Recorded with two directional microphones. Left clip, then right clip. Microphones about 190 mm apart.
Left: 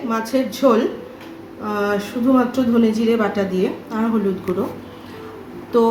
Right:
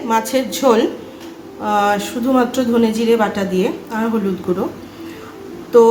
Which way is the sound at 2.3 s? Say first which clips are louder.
Right 2 dB; 35° right (ahead or behind).